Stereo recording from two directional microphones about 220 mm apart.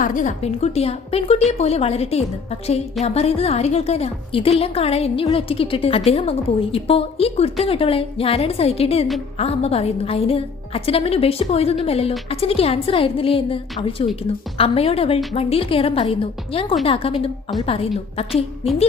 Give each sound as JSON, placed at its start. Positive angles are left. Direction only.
{"t": 0.0, "sound": "a woman's voice", "side_deg": 35}